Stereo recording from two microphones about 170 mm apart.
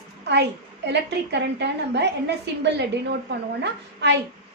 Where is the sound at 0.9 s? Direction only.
90° right.